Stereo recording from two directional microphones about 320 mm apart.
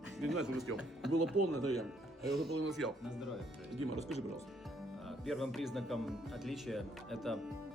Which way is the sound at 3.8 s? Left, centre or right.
Centre.